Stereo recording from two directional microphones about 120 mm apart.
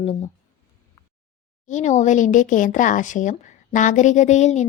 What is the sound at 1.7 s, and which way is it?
Speech, 80° left.